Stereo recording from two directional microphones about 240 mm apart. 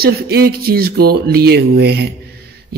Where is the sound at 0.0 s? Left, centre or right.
Right.